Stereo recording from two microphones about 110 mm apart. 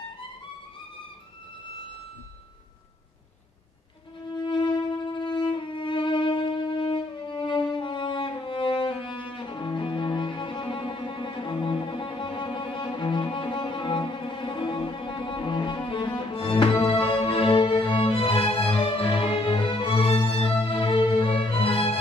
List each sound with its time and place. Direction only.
4.4 s violin: 45° left (ahead or behind)
9.3 s cello: 45° left (ahead or behind)